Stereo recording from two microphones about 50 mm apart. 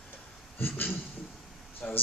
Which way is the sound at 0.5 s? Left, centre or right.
Left.